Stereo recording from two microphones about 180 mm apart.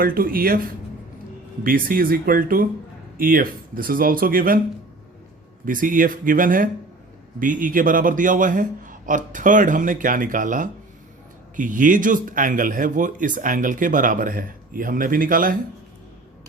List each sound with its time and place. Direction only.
0.0 s speech: 55° right (ahead or behind)
1.6 s speech: 50° right (ahead or behind)
5.6 s speech: 50° right (ahead or behind)